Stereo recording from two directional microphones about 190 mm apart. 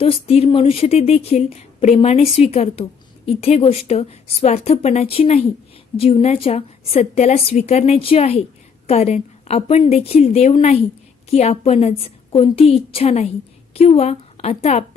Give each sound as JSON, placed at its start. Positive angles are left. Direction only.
{"t": 0.0, "sound": "a woman's voice", "side_deg": 30}